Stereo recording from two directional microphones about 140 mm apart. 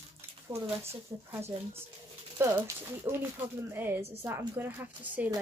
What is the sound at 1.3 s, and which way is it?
Speech, 20° right (ahead or behind).